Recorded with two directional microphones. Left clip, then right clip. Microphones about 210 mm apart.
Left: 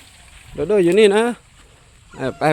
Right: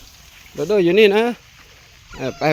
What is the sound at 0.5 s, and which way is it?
Speech, 5° left (ahead or behind).